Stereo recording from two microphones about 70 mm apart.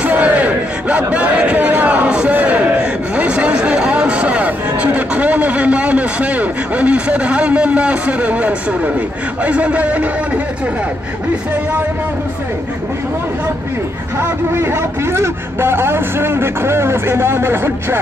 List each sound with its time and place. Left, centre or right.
0.0 s battle cry: centre
2.3 s a sound: right
9.4 s a man's voice: centre
14.2 s a man's voice: right